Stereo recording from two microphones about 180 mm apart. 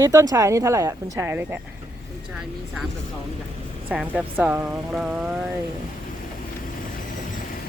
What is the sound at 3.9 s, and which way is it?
Speech, 5° right (ahead or behind).